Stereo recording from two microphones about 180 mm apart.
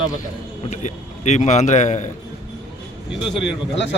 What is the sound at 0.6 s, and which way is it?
A man's voice, 40° left (ahead or behind).